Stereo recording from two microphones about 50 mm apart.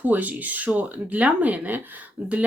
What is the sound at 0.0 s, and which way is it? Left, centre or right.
Speech, right.